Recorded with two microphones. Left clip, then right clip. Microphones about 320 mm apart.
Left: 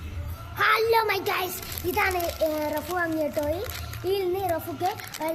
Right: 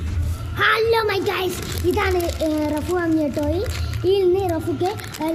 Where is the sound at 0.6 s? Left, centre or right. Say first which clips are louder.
Right 4 dB; left.